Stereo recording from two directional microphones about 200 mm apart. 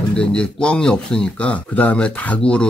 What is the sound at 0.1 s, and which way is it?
Speech, 5° left (ahead or behind).